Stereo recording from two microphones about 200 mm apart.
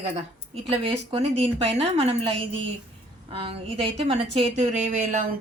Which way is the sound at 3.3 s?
30° right (ahead or behind).